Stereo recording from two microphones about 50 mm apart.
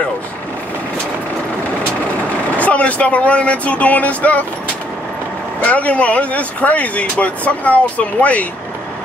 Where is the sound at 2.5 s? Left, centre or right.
Left.